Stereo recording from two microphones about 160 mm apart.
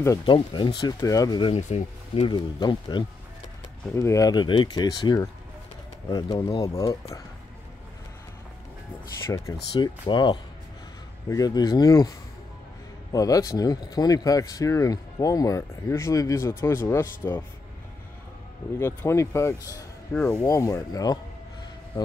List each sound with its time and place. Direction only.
0.2 s speech: 30° left (ahead or behind)
1.5 s speech: 45° left (ahead or behind)
2.2 s speech: 30° left (ahead or behind)
9.8 s speech: 30° left (ahead or behind)
18.8 s speech: 15° left (ahead or behind)
20.1 s speech: 5° left (ahead or behind)
20.4 s speech: 20° left (ahead or behind)